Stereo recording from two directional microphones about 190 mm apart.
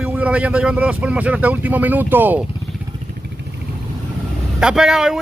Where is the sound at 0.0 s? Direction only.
5° right (ahead or behind).